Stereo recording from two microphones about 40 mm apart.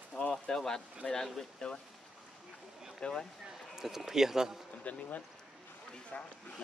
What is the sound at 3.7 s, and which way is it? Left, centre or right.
Speech, centre.